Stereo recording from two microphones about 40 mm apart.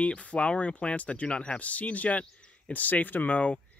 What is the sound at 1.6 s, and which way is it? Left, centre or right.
Speech, left.